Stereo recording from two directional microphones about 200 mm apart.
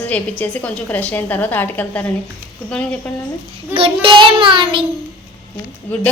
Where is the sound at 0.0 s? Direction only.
10° left (ahead or behind).